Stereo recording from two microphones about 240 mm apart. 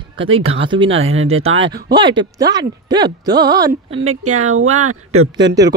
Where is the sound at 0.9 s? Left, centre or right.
Right.